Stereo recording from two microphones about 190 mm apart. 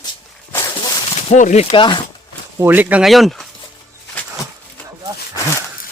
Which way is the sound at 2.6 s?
10° right (ahead or behind).